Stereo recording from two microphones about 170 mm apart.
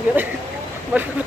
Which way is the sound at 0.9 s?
10° right (ahead or behind).